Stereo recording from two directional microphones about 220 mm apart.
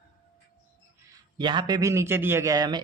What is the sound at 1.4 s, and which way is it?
Speech, 20° right (ahead or behind).